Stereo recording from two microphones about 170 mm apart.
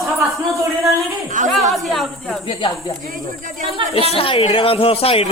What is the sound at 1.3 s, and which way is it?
Speech, 45° right (ahead or behind).